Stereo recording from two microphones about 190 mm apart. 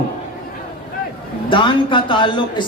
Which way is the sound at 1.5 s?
25° left (ahead or behind).